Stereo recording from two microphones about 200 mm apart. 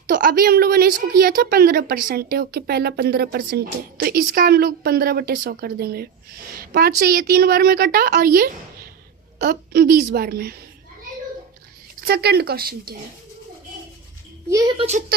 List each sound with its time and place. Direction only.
0.1 s a woman's voice: 45° right (ahead or behind)
11.9 s a woman's voice: 50° right (ahead or behind)
14.8 s speech: 35° right (ahead or behind)